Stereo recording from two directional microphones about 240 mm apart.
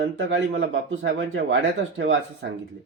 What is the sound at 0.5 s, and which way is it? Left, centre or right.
Speech, right.